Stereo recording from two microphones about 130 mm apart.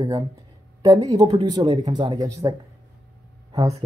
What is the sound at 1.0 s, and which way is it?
Speech, 30° right (ahead or behind).